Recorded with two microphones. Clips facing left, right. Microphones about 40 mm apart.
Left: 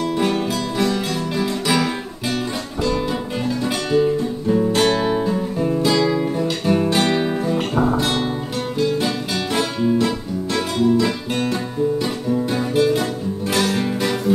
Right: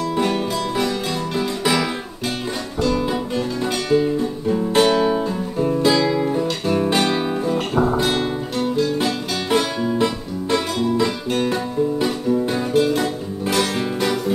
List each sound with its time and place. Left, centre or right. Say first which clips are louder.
0.2 s music: right 2 dB; centre
2.8 s music: right 1 dB; centre
3.6 s guitar: left 1 dB; centre
4.7 s music: right 6 dB; centre
5.0 s music: even; centre
5.8 s music: right 1 dB; centre
9.9 s music: left 1 dB; right
12.3 s music: even; centre